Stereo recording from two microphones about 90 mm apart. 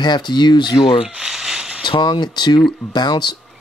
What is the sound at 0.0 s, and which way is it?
Speech, 55° left (ahead or behind).